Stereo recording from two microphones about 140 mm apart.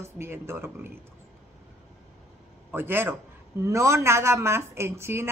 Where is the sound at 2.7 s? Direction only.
15° right (ahead or behind).